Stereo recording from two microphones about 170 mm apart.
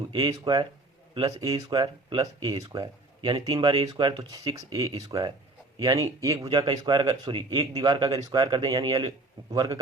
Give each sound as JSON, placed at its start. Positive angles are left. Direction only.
{"t": 0.1, "sound": "speech", "side_deg": -25}